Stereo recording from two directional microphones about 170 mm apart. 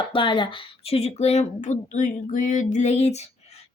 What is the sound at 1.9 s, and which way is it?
Female singing, 50° left (ahead or behind).